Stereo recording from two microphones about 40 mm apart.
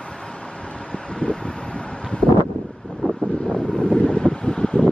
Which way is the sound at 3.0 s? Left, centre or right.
Left.